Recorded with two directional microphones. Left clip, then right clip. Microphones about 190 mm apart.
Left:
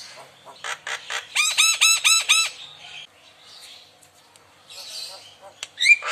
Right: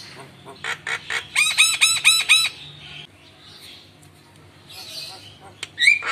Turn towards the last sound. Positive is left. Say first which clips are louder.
# even
turn(degrees=15)  # may be behind; listen again after turning